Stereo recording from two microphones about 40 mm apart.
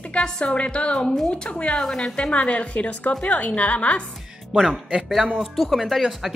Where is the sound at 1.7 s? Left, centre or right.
Centre; by 4.0 s left.